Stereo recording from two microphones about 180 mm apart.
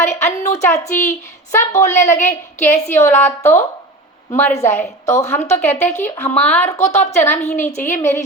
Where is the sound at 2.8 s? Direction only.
15° left (ahead or behind).